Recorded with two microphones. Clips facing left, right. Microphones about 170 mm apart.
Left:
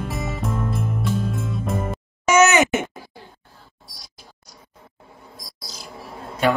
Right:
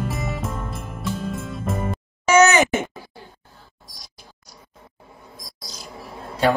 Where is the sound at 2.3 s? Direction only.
35° right (ahead or behind).